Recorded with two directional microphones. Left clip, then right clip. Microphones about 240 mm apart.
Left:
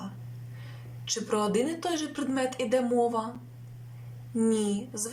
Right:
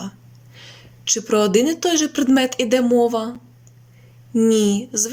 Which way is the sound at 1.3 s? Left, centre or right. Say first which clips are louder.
Right 11 dB; right.